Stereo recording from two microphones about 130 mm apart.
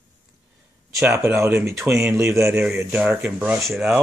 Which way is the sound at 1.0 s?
20° right (ahead or behind).